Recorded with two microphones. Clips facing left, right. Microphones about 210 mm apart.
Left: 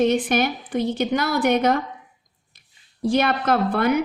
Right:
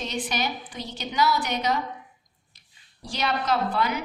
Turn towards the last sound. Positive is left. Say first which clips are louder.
# left 7 dB
turn(degrees=55)  # may be behind; listen again after turning